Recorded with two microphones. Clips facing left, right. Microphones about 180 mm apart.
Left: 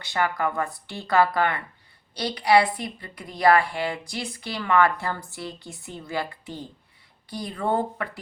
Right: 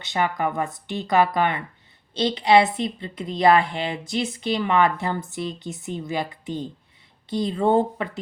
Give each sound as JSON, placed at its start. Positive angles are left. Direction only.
{"t": 0.0, "sound": "a woman's voice", "side_deg": -20}